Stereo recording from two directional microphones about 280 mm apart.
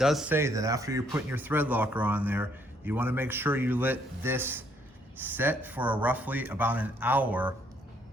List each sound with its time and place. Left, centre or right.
0.0 s a man's voice: centre